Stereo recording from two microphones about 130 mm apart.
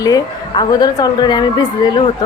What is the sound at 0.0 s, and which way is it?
A woman's voice, 35° left (ahead or behind).